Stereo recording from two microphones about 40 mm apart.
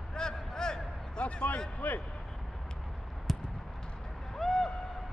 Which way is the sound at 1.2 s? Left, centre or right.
Left.